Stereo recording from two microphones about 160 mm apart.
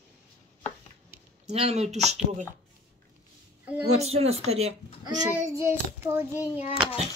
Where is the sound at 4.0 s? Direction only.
40° right (ahead or behind).